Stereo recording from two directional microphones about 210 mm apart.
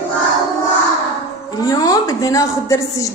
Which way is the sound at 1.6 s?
15° left (ahead or behind).